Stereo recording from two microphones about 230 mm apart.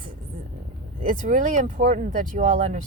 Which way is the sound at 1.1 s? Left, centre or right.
Right.